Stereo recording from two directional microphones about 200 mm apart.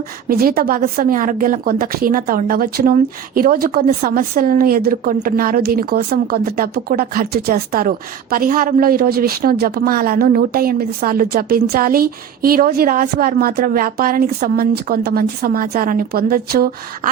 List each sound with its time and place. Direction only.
0.3 s speech: 45° right (ahead or behind)